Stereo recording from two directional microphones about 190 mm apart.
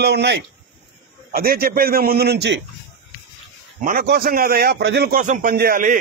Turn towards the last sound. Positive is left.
turn(degrees=-45)  # may be behind; listen again after turning